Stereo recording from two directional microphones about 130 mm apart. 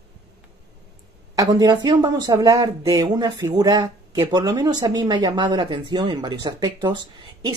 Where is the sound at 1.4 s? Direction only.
30° right (ahead or behind).